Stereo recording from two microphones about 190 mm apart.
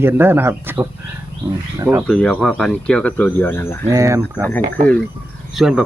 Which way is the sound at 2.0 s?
5° left (ahead or behind).